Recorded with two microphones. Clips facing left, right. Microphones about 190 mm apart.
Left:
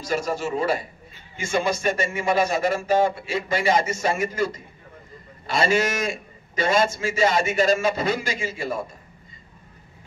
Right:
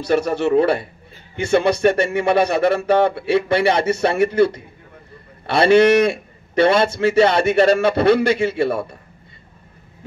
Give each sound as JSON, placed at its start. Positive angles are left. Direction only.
{"t": 0.0, "sound": "a man's voice", "side_deg": -65}